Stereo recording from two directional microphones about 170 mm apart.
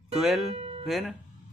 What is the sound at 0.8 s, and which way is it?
Speech, centre (ahead or behind).